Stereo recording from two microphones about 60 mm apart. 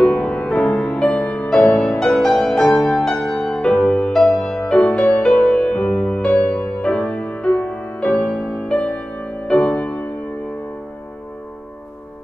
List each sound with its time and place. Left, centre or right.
0.0 s music: centre
1.8 s music: centre
5.6 s music: left
8.4 s music: centre